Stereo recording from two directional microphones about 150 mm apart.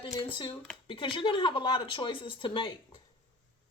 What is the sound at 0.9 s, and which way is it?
Speech, 35° left (ahead or behind).